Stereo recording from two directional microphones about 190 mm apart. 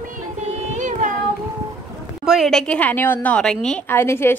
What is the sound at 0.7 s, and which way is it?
Carnatic music, 40° right (ahead or behind).